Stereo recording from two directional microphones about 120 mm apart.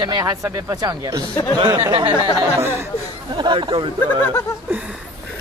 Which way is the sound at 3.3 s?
45° right (ahead or behind).